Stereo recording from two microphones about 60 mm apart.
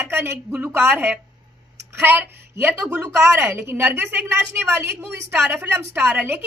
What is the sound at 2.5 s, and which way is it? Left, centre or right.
A woman's voice, right.